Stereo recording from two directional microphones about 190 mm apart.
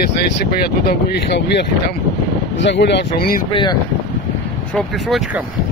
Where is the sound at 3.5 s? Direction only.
25° left (ahead or behind).